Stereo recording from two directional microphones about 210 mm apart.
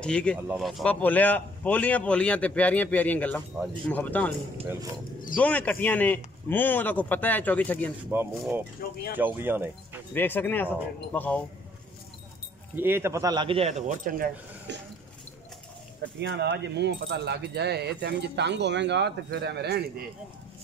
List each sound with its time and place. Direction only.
0.0 s speech: 5° left (ahead or behind)
5.4 s speech: 5° left (ahead or behind)
8.1 s speech: 10° right (ahead or behind)
10.1 s speech: 10° left (ahead or behind)
12.7 s speech: 10° right (ahead or behind); by 14.8 s 45° right (ahead or behind)
16.2 s speech: 55° right (ahead or behind)